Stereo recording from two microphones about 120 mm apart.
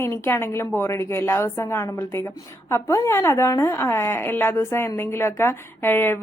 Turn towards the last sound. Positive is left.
turn(degrees=20)  # may be behind; listen again after turning